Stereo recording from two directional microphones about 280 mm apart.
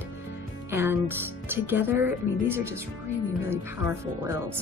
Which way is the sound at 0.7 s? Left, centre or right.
Centre.